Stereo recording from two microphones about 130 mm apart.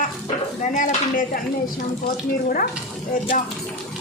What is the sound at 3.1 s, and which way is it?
Speech, 90° left.